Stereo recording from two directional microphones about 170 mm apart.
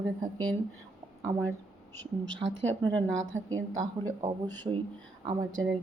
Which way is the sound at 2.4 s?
90° right.